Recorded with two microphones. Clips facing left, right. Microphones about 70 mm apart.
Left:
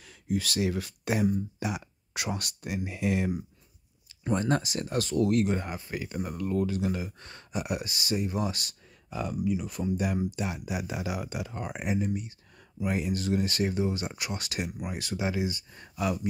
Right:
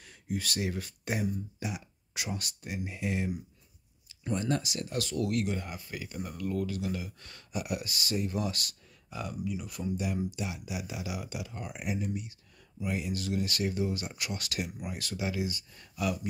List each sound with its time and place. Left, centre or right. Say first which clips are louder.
0.4 s speech: left 4 dB; left
1.2 s speech: left 6 dB; left
4.3 s speech: left 4 dB; left
9.1 s speech: left 6 dB; left
9.9 s speech: left 3 dB; left